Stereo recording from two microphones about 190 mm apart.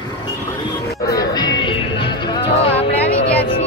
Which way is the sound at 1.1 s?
20° left (ahead or behind).